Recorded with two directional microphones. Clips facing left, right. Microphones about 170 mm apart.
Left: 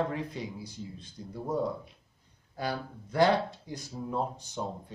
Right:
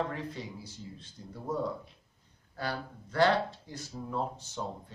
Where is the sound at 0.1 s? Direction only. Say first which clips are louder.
Left 3 dB; 15° left (ahead or behind).